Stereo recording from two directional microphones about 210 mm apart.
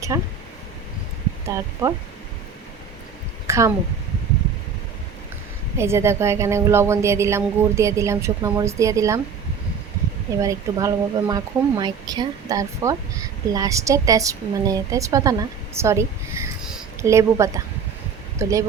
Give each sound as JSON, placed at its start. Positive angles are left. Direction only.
{"t": 0.1, "sound": "speech", "side_deg": -15}
{"t": 1.5, "sound": "speech", "side_deg": -15}
{"t": 3.4, "sound": "a sound", "side_deg": -15}
{"t": 5.7, "sound": "speech", "side_deg": -10}
{"t": 10.4, "sound": "speech", "side_deg": -15}